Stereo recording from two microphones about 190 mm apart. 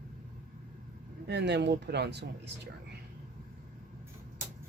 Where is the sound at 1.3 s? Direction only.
65° right (ahead or behind).